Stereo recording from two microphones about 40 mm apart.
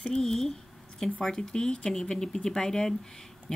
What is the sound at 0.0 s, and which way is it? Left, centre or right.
Speech, centre.